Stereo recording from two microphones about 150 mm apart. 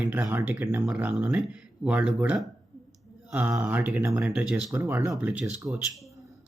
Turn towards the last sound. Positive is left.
turn(degrees=0)  # may be behind; listen again after turning